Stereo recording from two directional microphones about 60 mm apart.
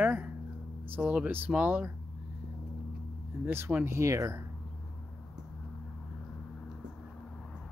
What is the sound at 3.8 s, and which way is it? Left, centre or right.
Speech, right.